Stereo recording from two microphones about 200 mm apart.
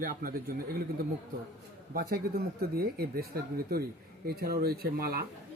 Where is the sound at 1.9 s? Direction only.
50° right (ahead or behind).